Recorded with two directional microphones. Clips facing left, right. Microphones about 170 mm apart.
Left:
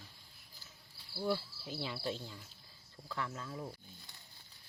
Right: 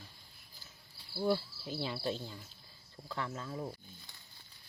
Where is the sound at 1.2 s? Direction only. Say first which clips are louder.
Right 4 dB; 30° right (ahead or behind).